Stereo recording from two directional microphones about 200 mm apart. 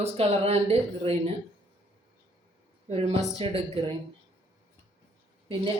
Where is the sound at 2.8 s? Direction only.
35° right (ahead or behind).